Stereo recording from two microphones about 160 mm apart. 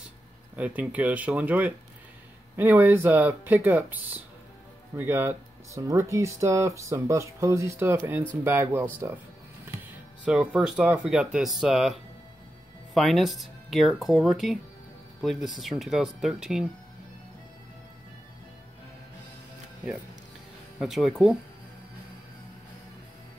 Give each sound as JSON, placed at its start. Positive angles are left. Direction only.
{"t": 0.6, "sound": "speech", "side_deg": -10}
{"t": 10.2, "sound": "speech", "side_deg": -5}
{"t": 20.8, "sound": "speech", "side_deg": 0}